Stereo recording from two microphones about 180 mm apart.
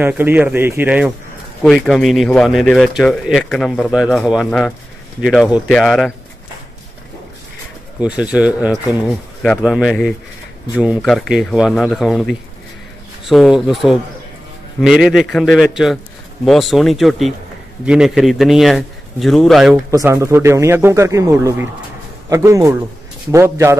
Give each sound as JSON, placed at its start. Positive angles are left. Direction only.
{"t": 0.0, "sound": "a man's voice", "side_deg": -10}
{"t": 8.0, "sound": "a man's voice", "side_deg": -5}
{"t": 19.9, "sound": "a man's voice", "side_deg": -15}